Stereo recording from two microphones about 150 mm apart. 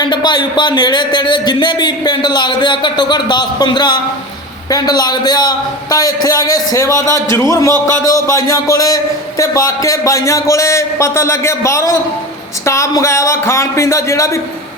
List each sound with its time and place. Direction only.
0.0 s speech: 30° left (ahead or behind)